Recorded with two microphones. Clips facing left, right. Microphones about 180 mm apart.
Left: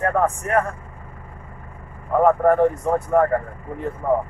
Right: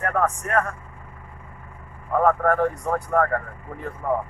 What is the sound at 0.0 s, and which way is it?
Speech, 25° left (ahead or behind).